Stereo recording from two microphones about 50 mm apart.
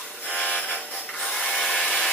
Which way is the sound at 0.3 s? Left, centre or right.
Left.